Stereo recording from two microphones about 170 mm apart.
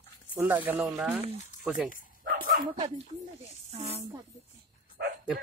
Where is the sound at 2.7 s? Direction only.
35° right (ahead or behind).